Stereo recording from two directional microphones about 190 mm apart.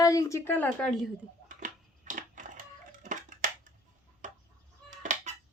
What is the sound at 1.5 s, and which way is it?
Crushing, 45° right (ahead or behind).